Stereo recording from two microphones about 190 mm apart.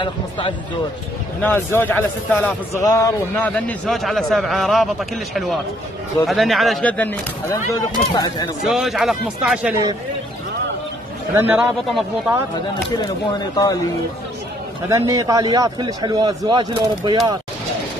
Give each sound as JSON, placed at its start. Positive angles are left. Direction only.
{"t": 0.0, "sound": "speech", "side_deg": 25}
{"t": 1.4, "sound": "a man's voice", "side_deg": 10}
{"t": 7.7, "sound": "speech", "side_deg": 20}
{"t": 8.6, "sound": "a man's voice", "side_deg": 0}
{"t": 11.3, "sound": "a man's voice", "side_deg": -5}
{"t": 13.0, "sound": "speech", "side_deg": 20}
{"t": 14.9, "sound": "a man's voice", "side_deg": -15}